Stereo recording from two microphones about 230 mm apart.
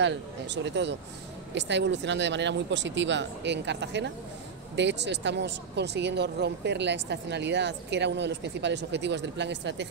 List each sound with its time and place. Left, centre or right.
0.0 s speech: right